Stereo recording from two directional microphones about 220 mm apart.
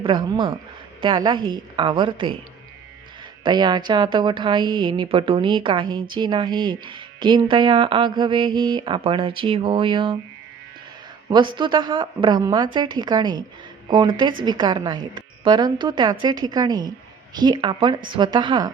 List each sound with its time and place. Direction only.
0.0 s a woman's voice: 20° right (ahead or behind)
3.4 s a woman's voice: 20° right (ahead or behind)
11.3 s a woman's voice: 20° right (ahead or behind)